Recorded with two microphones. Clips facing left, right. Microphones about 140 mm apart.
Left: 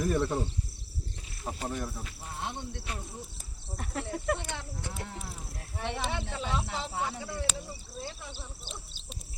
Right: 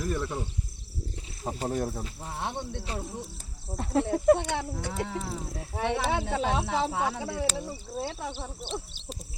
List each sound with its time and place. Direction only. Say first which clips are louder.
0.0 s speech: left 3 dB; 15° left (ahead or behind)
1.5 s speech: right 5 dB; 35° right (ahead or behind)
2.4 s speech: right 4 dB; 65° right (ahead or behind)
2.9 s speech: right 5 dB; 30° right (ahead or behind)
4.4 s speech: right 9 dB; 65° right (ahead or behind)